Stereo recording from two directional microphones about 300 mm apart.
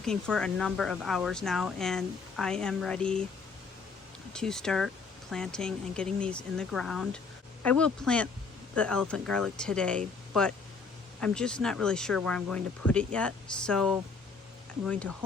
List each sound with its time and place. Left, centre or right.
0.0 s speech: centre
4.3 s speech: centre
11.2 s speech: centre